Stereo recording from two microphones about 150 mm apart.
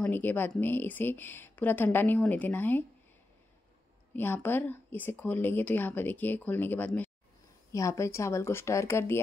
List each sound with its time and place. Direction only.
0.0 s speech: 10° left (ahead or behind)
4.1 s speech: 15° left (ahead or behind)